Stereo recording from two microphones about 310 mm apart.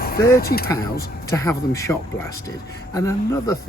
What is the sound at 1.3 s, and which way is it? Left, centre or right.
Speech, centre.